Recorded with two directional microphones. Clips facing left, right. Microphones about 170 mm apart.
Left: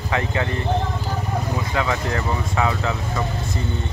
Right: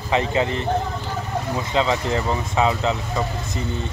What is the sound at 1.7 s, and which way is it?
Speech, 20° right (ahead or behind).